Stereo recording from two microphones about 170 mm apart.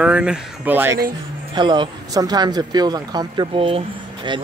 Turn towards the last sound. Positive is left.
turn(degrees=-30)  # may be behind; listen again after turning